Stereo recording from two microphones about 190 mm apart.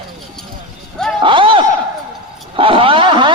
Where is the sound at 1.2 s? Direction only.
25° right (ahead or behind).